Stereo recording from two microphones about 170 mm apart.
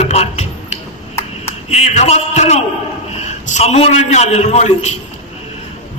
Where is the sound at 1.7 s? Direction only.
40° left (ahead or behind).